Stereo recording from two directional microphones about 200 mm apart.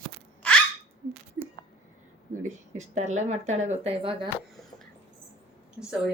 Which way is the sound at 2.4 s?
35° right (ahead or behind).